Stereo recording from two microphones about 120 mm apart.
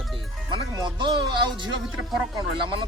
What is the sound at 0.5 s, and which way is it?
Speech, 40° right (ahead or behind).